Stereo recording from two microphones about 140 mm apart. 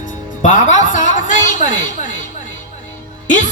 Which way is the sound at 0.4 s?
65° left (ahead or behind).